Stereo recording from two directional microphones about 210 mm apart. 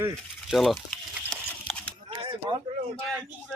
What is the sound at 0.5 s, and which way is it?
Speech, centre (ahead or behind).